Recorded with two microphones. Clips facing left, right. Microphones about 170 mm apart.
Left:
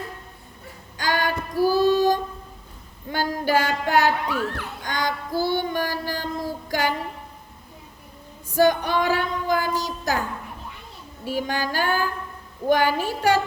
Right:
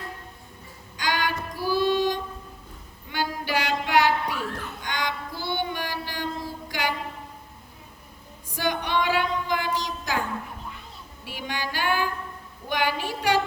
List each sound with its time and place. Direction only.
0.9 s female singing: 45° left (ahead or behind)
3.1 s child singing: 45° left (ahead or behind)
8.4 s child singing: 45° left (ahead or behind)
11.3 s a sound: 40° left (ahead or behind)